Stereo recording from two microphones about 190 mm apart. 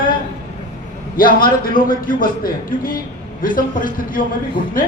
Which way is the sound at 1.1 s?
50° left (ahead or behind).